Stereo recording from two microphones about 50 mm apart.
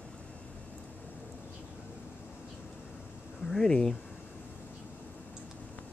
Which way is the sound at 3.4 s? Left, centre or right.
Centre.